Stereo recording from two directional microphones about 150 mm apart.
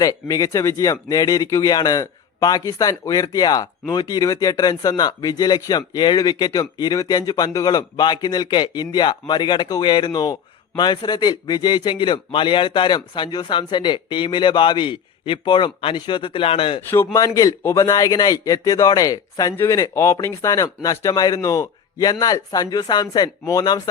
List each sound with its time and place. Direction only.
0.0 s a man's voice: 20° left (ahead or behind)
16.9 s speech: 20° left (ahead or behind)